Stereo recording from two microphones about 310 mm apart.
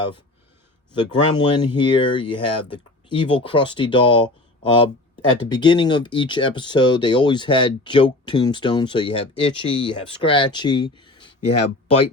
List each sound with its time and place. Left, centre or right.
1.4 s speech: centre